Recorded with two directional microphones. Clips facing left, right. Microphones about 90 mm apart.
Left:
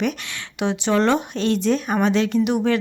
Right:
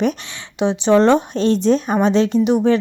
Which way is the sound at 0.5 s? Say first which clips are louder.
Right 6 dB; 25° right (ahead or behind).